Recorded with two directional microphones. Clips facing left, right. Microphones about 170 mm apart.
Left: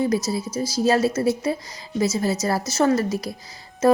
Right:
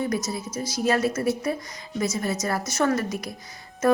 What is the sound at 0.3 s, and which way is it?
Speech, 30° left (ahead or behind).